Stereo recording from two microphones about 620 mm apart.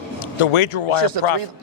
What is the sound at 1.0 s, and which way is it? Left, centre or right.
Speech, right.